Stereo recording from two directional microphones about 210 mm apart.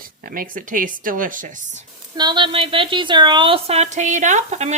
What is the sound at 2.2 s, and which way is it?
Speech, 20° right (ahead or behind).